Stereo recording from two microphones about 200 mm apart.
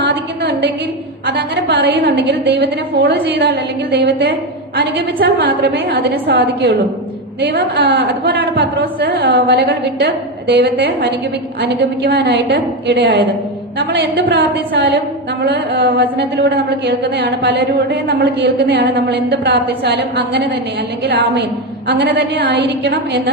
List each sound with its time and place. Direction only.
0.1 s a sound: 55° right (ahead or behind)
1.3 s a woman's voice: 60° right (ahead or behind)
21.8 s a woman's voice: 55° right (ahead or behind)